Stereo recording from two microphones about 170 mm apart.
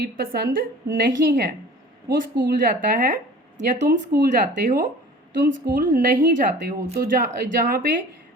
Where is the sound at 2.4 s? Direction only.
50° right (ahead or behind).